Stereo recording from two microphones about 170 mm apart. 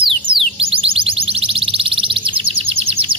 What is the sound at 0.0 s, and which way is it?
Music, 35° right (ahead or behind).